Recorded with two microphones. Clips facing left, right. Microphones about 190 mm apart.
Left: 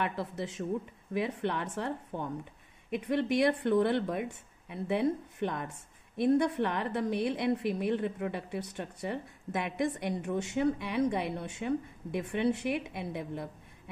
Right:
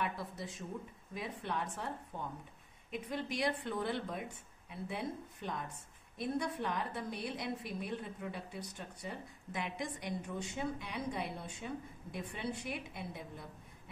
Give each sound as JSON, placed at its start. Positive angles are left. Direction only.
{"t": 0.0, "sound": "a woman's voice", "side_deg": 70}